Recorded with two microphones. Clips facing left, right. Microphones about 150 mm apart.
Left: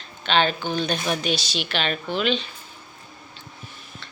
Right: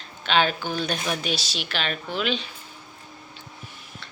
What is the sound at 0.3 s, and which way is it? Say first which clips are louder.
A woman's voice: left 1 dB; 5° right (ahead or behind).